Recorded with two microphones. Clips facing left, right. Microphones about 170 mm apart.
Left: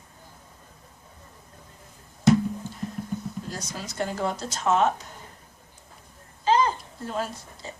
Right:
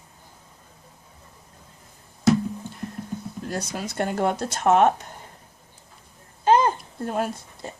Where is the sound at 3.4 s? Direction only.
60° right (ahead or behind).